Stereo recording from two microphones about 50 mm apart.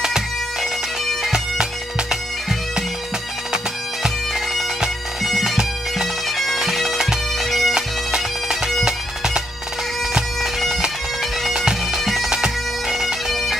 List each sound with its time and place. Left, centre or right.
0.0 s bagpipes: centre
3.5 s bagpipes: centre
7.4 s bagpipes: centre
7.7 s bagpipes: centre
10.4 s bagpipes: centre
12.0 s bagpipes: centre
12.3 s bagpipes: centre
13.3 s bagpipes: centre